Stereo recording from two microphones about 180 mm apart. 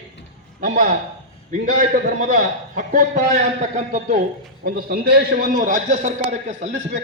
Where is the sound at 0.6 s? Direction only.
45° right (ahead or behind).